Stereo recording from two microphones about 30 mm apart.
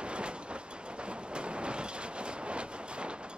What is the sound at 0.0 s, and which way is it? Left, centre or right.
Train, right.